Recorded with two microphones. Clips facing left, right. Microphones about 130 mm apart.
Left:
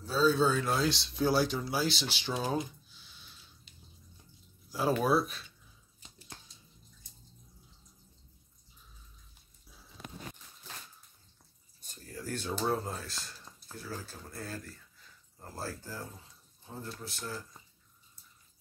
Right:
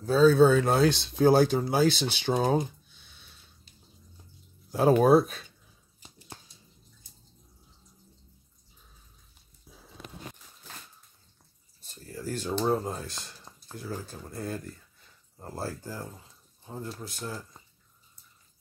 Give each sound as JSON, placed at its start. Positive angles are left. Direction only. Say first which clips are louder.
{"t": 0.0, "sound": "speech", "louder": "right 8 dB", "side_deg": -50}
{"t": 4.6, "sound": "speech", "louder": "right 8 dB", "side_deg": -50}
{"t": 12.1, "sound": "a sound", "louder": "right 4 dB", "side_deg": -10}
{"t": 13.7, "sound": "speech", "louder": "right 5 dB", "side_deg": -20}